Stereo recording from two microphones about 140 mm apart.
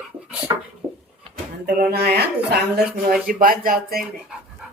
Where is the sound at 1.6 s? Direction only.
90° right.